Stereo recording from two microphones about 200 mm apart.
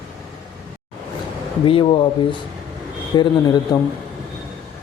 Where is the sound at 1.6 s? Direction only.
25° left (ahead or behind).